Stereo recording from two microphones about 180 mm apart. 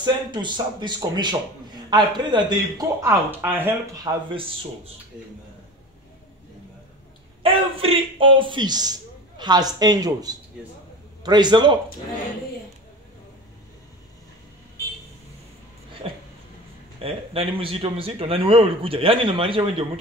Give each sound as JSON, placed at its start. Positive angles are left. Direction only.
{"t": 0.0, "sound": "speech", "side_deg": -25}
{"t": 3.0, "sound": "speech", "side_deg": -10}
{"t": 7.4, "sound": "speech", "side_deg": -30}
{"t": 16.0, "sound": "a sound", "side_deg": -35}
{"t": 17.0, "sound": "speech", "side_deg": -30}